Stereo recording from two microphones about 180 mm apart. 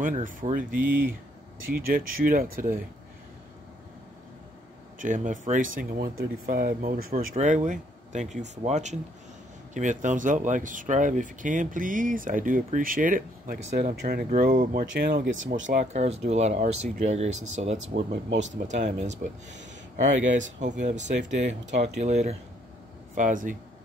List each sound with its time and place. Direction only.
0.0 s speech: 50° right (ahead or behind)
4.9 s speech: 45° right (ahead or behind)
15.2 s speech: 90° right
15.9 s speech: 35° right (ahead or behind)
20.3 s speech: 45° right (ahead or behind)
21.2 s speech: 90° right
21.8 s speech: 40° right (ahead or behind)